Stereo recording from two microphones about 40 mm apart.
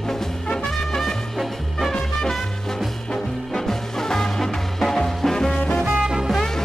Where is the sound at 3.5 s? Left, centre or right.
Centre.